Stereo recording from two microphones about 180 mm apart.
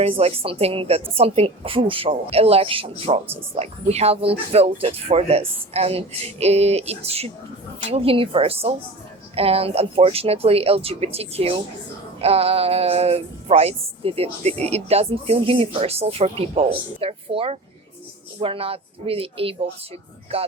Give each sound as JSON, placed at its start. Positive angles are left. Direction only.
{"t": 0.0, "sound": "music", "side_deg": -35}